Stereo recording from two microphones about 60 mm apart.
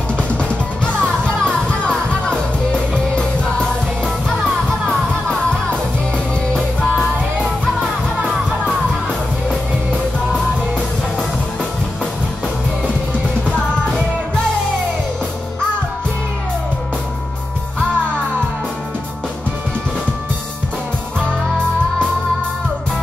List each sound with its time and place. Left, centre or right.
1.0 s music: centre